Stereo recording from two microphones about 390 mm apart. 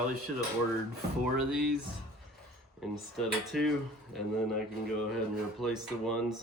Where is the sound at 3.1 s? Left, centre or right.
Centre.